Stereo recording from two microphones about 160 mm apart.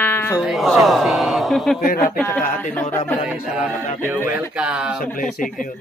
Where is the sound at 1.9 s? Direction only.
60° left (ahead or behind).